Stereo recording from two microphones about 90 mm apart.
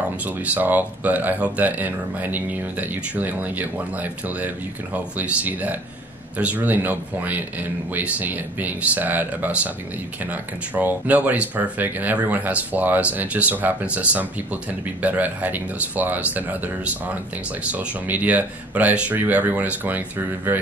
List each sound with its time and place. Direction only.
0.2 s speech: 20° right (ahead or behind)